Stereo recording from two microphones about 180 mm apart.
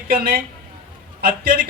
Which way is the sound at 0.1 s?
55° right (ahead or behind).